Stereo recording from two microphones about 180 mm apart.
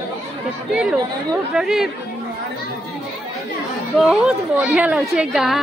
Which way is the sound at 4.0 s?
5° right (ahead or behind).